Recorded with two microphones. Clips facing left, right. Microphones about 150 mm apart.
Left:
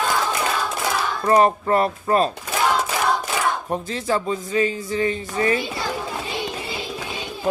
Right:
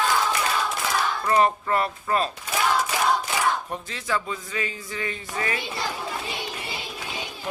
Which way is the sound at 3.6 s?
40° left (ahead or behind).